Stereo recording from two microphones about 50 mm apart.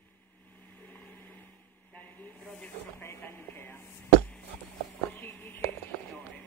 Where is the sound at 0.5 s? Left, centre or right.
Left.